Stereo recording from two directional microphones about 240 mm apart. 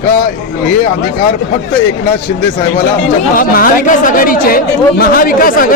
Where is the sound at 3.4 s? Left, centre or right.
Left.